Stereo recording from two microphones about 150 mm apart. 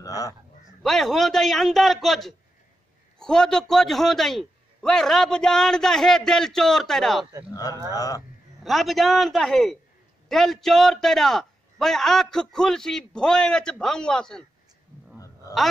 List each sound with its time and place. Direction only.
0.0 s speech: 25° left (ahead or behind)
0.8 s a man's voice: centre (ahead or behind)
7.9 s a man's voice: 25° left (ahead or behind)
8.6 s a man's voice: centre (ahead or behind)
15.1 s a sound: 20° left (ahead or behind)